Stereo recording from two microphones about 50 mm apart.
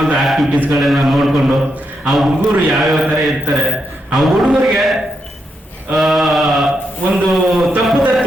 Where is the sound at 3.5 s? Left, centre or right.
Centre.